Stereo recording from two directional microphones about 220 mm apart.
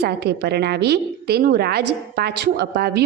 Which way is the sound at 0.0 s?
50° right (ahead or behind).